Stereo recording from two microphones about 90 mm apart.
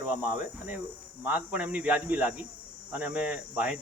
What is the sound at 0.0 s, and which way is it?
Speech, 15° right (ahead or behind).